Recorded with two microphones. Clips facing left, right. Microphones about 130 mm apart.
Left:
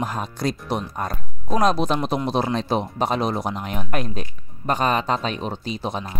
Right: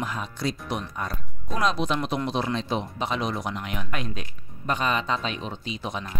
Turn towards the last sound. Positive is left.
turn(degrees=35)  # may be behind; listen again after turning